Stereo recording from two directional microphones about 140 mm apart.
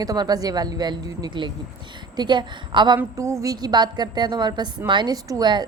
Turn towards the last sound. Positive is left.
turn(degrees=-30)  # may be behind; listen again after turning